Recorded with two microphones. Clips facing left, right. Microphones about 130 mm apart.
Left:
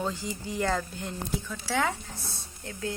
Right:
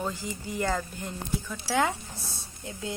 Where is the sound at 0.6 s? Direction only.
5° right (ahead or behind).